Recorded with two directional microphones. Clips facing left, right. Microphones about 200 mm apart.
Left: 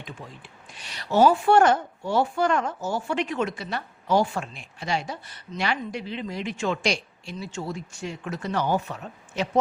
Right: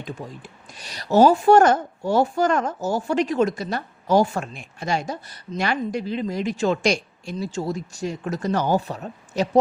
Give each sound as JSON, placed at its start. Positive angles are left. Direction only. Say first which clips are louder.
{"t": 0.0, "sound": "speech", "louder": "right 7 dB", "side_deg": -40}